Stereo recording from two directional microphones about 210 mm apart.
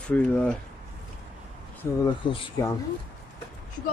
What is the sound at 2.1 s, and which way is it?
Speech, 20° left (ahead or behind).